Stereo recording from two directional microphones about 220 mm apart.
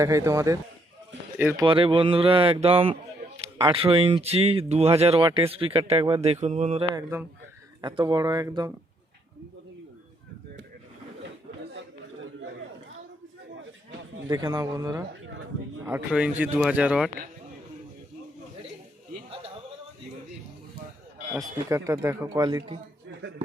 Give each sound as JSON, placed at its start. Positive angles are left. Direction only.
{"t": 0.0, "sound": "speech", "side_deg": -15}
{"t": 1.6, "sound": "speech", "side_deg": -25}
{"t": 6.9, "sound": "speech", "side_deg": -10}
{"t": 14.3, "sound": "speech", "side_deg": -15}
{"t": 21.3, "sound": "speech", "side_deg": -15}